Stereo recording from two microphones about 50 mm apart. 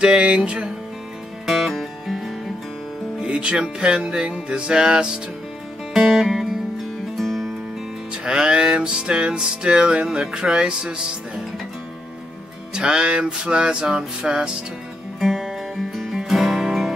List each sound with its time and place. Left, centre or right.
0.0 s music: centre
1.4 s music: centre
3.2 s music: centre
5.9 s music: centre
8.1 s music: centre
12.7 s music: centre
15.1 s music: centre